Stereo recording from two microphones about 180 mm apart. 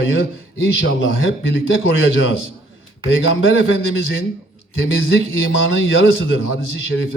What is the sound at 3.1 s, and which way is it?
Speech, 90° left.